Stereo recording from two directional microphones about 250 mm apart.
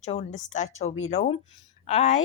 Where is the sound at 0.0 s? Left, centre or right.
Left.